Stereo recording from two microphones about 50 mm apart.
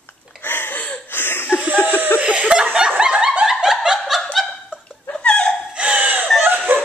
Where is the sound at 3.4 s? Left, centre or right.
Centre.